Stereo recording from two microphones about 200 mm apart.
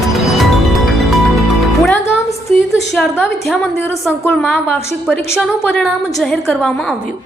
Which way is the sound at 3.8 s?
10° left (ahead or behind).